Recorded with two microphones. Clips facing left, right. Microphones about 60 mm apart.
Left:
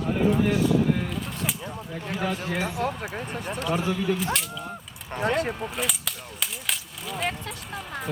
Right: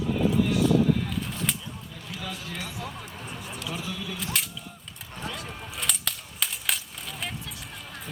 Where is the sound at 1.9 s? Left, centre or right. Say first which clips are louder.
Left 10 dB; left.